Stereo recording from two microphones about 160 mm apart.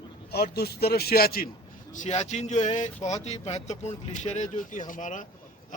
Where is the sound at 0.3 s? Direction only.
80° left.